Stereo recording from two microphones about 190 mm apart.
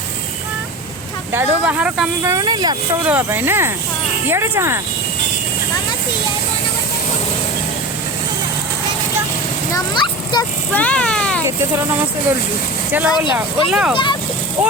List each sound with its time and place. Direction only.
1.3 s speech: 10° right (ahead or behind)
2.3 s speech: 20° right (ahead or behind)
3.1 s speech: 10° right (ahead or behind)
9.7 s a child's voice: 25° left (ahead or behind)
10.7 s speech: 10° left (ahead or behind)
12.9 s speech: 10° right (ahead or behind)